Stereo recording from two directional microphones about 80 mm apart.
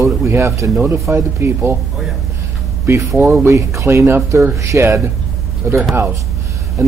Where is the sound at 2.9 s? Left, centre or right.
Right.